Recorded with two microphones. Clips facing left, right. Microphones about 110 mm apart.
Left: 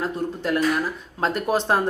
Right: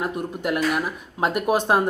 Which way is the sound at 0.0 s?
15° right (ahead or behind).